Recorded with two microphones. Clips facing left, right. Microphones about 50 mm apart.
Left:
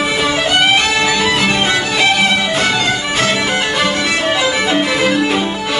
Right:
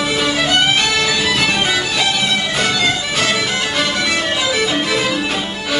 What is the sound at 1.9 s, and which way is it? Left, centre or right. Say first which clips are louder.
Music: left 5 dB; left.